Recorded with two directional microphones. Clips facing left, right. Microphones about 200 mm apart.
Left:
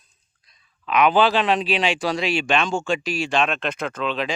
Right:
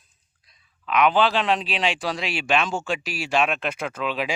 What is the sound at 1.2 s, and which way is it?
Speech, 5° left (ahead or behind).